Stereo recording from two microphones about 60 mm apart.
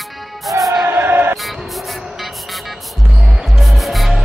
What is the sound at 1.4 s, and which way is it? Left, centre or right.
Music, centre.